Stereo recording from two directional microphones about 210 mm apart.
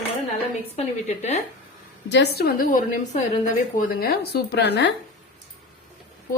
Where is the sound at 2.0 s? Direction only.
55° left (ahead or behind).